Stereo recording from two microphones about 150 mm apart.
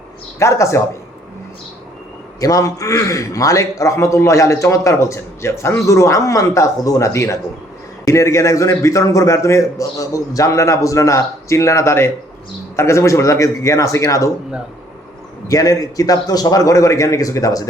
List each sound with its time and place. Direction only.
0.3 s a man's voice: 20° left (ahead or behind)
2.4 s a man's voice: 25° left (ahead or behind)
15.4 s a man's voice: 25° left (ahead or behind)